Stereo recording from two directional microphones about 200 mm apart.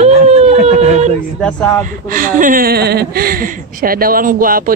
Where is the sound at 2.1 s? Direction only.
45° right (ahead or behind).